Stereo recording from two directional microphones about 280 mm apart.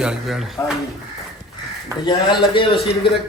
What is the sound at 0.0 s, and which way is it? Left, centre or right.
Speech, centre.